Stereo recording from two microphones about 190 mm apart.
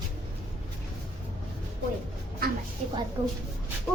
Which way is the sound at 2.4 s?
55° right (ahead or behind).